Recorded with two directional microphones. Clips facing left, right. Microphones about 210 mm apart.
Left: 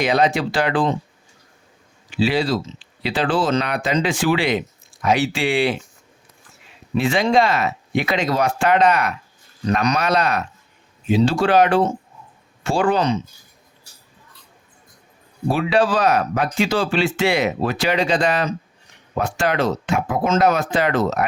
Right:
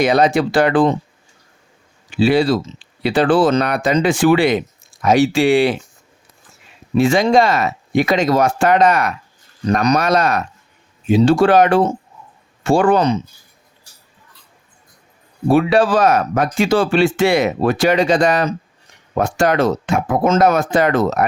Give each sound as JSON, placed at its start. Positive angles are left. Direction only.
{"t": 0.0, "sound": "speech", "side_deg": -45}
{"t": 2.0, "sound": "speech", "side_deg": -50}
{"t": 6.9, "sound": "speech", "side_deg": -45}
{"t": 15.4, "sound": "speech", "side_deg": -50}